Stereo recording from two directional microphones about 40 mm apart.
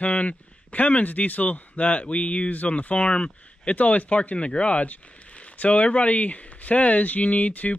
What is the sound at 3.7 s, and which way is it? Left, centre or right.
Speech, left.